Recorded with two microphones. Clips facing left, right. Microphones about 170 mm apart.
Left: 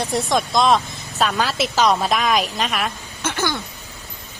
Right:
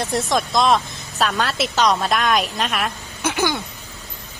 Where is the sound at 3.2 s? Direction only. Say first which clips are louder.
Right 2 dB; 10° right (ahead or behind).